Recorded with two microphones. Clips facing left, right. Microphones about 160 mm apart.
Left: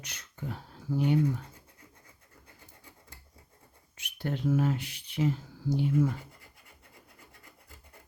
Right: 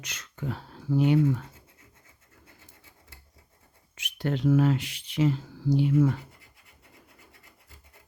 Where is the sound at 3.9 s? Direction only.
90° right.